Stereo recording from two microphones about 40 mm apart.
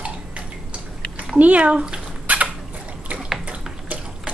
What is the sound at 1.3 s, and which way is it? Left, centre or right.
Speech, right.